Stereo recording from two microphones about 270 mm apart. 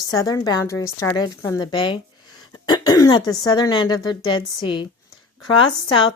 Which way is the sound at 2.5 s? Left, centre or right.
Centre.